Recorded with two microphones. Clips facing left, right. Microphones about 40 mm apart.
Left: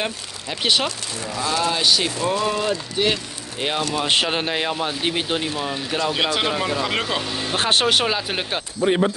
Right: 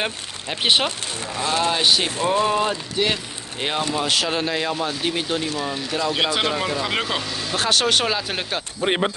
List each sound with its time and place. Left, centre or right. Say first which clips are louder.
0.0 s speech: even; centre
1.2 s speech: even; right
1.7 s speech: even; right
2.4 s speech: right 1 dB; right
3.0 s speech: right 1 dB; centre
4.1 s speech: left 1 dB; left
6.1 s speech: right 1 dB; centre
7.2 s speech: left 1 dB; left
7.8 s speech: left 1 dB; centre
8.8 s speech: left 3 dB; right